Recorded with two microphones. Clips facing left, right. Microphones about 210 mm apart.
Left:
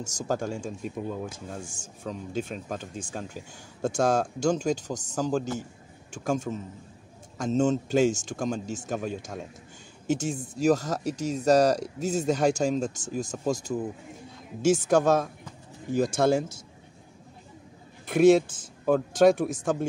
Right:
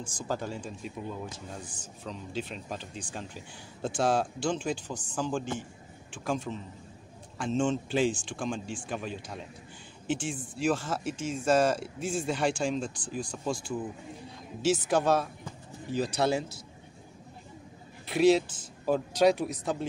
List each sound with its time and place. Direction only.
0.0 s speech: 45° left (ahead or behind)
18.0 s speech: 50° left (ahead or behind)